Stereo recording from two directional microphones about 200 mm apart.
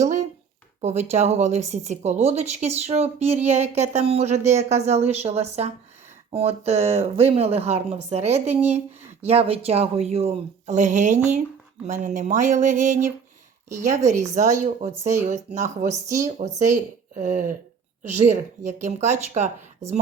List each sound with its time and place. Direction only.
0.8 s speech: 35° right (ahead or behind)
15.8 s speech: 15° right (ahead or behind)
16.2 s speech: 35° right (ahead or behind)